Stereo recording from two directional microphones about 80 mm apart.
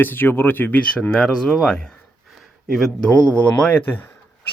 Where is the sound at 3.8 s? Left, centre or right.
Left.